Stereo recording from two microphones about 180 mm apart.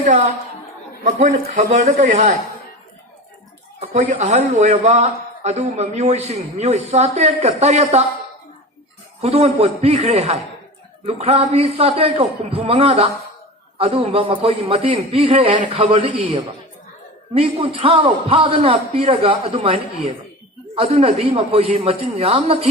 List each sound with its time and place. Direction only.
1.0 s speech: 40° right (ahead or behind)
3.8 s a man's voice: 40° right (ahead or behind)
9.2 s a man's voice: 35° right (ahead or behind)